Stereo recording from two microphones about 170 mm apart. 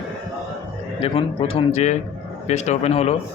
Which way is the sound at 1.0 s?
35° left (ahead or behind).